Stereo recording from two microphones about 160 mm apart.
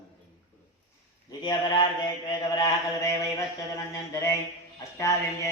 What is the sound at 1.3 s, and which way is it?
Mantra, 25° left (ahead or behind).